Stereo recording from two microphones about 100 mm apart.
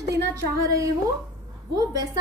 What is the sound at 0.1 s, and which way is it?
A woman's voice, 30° right (ahead or behind).